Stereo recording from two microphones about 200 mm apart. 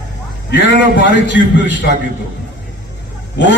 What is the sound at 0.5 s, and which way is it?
A man's voice, 65° left (ahead or behind).